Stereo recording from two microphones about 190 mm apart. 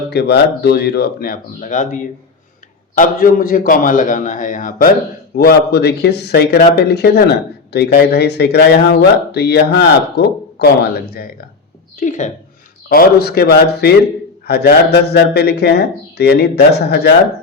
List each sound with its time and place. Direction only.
0.1 s a man's voice: 60° left (ahead or behind); by 4.9 s 45° left (ahead or behind)
5.4 s speech: 55° left (ahead or behind)
11.9 s a woman's voice: 40° left (ahead or behind)
12.9 s speech: 55° left (ahead or behind)